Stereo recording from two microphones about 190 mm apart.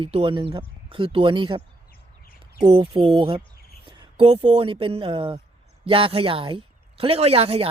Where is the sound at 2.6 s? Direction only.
25° right (ahead or behind).